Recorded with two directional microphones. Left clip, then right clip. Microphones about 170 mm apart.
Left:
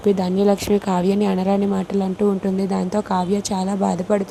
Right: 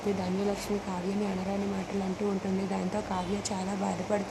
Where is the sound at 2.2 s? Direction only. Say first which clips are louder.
Left 12 dB; 35° left (ahead or behind).